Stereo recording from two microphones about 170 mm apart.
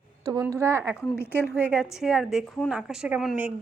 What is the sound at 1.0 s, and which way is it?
Speech, 10° left (ahead or behind).